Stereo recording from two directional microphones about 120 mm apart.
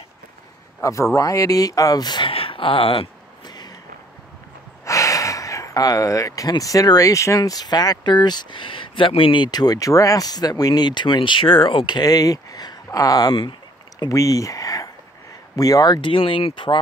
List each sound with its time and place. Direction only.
0.7 s speech: 25° left (ahead or behind); by 3.1 s 50° left (ahead or behind)
3.4 s a sound: 35° left (ahead or behind)
4.8 s gasp: 25° left (ahead or behind)
6.6 s speech: 30° left (ahead or behind)
13.3 s a sound: 45° left (ahead or behind)
14.0 s speech: 30° left (ahead or behind)